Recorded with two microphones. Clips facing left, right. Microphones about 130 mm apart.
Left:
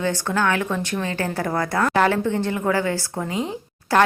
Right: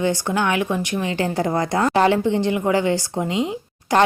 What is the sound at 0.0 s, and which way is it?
A woman's voice, 15° right (ahead or behind).